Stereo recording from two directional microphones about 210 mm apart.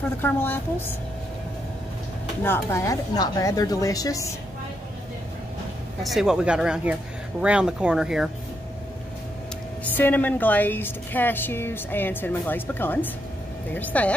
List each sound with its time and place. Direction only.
0.2 s a woman's voice: 10° left (ahead or behind)
2.4 s a woman's voice: 10° left (ahead or behind)
6.0 s speech: centre (ahead or behind)
9.9 s a woman's voice: 10° left (ahead or behind)